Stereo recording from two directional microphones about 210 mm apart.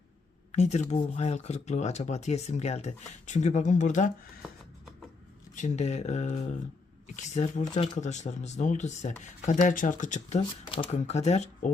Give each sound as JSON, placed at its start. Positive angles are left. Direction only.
{"t": 0.5, "sound": "speech", "side_deg": 30}
{"t": 5.5, "sound": "speech", "side_deg": 35}